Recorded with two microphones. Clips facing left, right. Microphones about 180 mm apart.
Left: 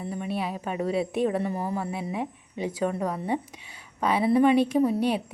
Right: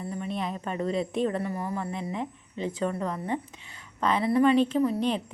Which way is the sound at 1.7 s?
10° left (ahead or behind).